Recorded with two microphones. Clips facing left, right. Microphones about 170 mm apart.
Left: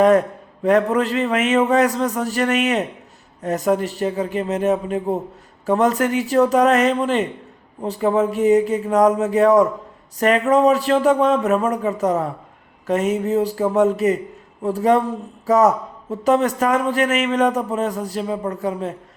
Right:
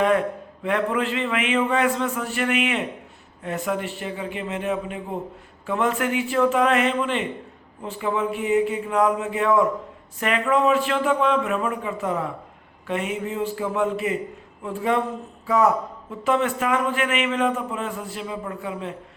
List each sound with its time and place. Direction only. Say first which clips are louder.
0.0 s a man's voice: left 6 dB; 40° left (ahead or behind)